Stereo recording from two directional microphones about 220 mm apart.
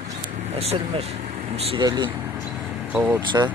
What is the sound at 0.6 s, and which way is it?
Speech, 30° right (ahead or behind).